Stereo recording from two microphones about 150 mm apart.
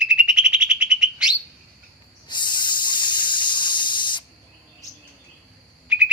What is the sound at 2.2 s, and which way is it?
Hiss, 30° left (ahead or behind).